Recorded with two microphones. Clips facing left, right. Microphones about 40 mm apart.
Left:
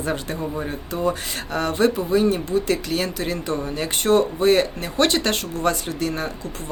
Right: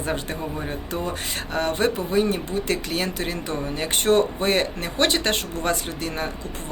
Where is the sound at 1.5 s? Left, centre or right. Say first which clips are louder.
Left 3 dB; right.